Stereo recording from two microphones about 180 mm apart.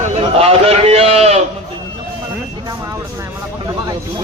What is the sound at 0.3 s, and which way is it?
Speech, 35° right (ahead or behind).